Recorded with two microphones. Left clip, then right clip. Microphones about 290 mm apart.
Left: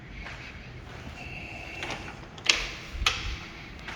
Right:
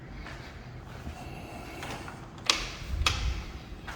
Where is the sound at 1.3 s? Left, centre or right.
Right.